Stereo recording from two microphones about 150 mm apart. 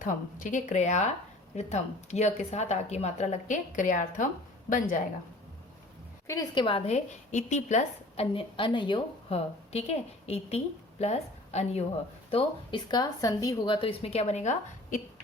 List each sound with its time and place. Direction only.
0.0 s a woman's voice: 60° left (ahead or behind)
6.2 s a woman's voice: 25° left (ahead or behind)
9.7 s a woman's voice: 45° left (ahead or behind)
12.3 s a woman's voice: 35° left (ahead or behind); by 15.0 s 55° left (ahead or behind)